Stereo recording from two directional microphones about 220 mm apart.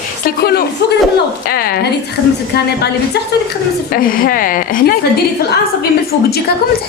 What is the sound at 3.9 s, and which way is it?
Speech, 40° left (ahead or behind).